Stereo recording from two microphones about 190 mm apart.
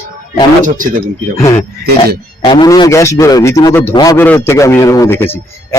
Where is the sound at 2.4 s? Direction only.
20° left (ahead or behind).